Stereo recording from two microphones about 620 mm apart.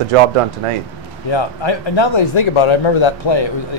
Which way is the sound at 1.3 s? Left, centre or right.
Left.